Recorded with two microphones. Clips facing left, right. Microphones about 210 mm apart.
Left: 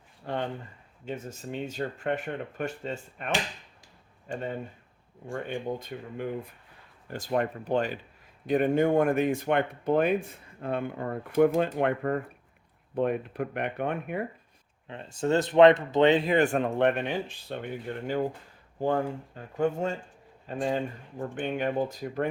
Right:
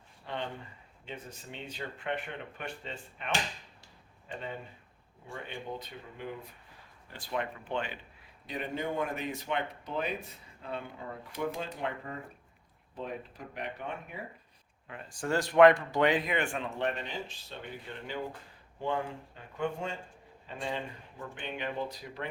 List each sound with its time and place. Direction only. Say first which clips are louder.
0.3 s a sound: left 7 dB; 50° left (ahead or behind)
1.0 s speech: left 8 dB; 45° left (ahead or behind)
8.4 s speech: left 12 dB; 50° left (ahead or behind)
14.8 s speech: left 7 dB; 25° left (ahead or behind); by 22.3 s 50° left (ahead or behind)